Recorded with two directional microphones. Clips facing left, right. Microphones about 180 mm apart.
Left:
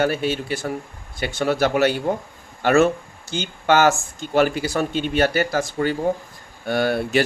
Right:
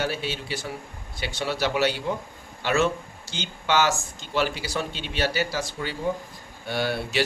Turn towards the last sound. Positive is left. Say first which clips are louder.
# left 6 dB
turn(degrees=50)  # may be behind; listen again after turning